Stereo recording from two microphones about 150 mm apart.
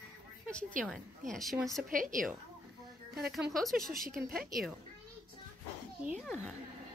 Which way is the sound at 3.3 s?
Centre (ahead or behind).